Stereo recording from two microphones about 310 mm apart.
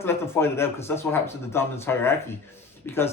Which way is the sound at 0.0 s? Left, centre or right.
Centre.